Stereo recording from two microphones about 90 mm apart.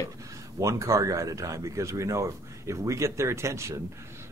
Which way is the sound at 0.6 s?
35° right (ahead or behind).